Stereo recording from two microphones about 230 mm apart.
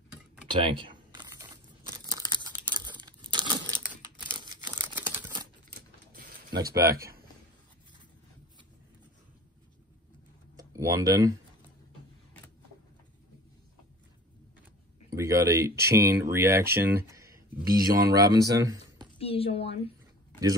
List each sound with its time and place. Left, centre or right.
0.5 s computer keyboard: right
1.9 s tearing: centre
4.9 s crumpling: centre
6.7 s speech: centre
7.0 s a sound: right
10.5 s speech: centre
15.1 s speech: centre
19.1 s speech: left